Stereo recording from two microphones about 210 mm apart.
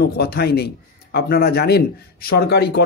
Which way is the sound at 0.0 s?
50° left (ahead or behind).